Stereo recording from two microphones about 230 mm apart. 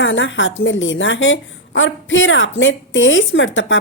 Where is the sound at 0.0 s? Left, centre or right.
Left.